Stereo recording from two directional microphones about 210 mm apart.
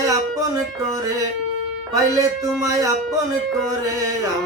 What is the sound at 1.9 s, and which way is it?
Music, 15° right (ahead or behind).